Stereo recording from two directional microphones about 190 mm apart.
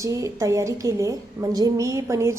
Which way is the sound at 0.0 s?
15° right (ahead or behind).